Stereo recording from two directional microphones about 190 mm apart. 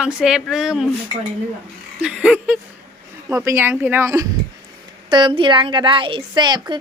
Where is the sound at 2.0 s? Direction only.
5° right (ahead or behind).